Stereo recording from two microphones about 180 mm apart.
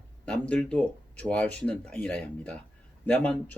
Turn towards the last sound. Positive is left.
turn(degrees=10)  # may be behind; listen again after turning